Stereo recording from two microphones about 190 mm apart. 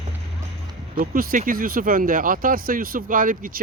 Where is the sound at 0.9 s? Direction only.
50° right (ahead or behind).